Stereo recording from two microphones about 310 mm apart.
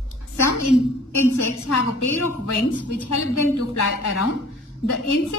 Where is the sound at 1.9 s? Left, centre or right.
Left.